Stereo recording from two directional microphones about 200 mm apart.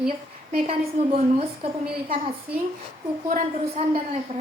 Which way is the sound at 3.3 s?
30° right (ahead or behind).